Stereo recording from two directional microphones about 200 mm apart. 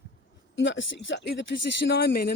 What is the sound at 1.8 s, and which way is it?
Speech, 50° left (ahead or behind).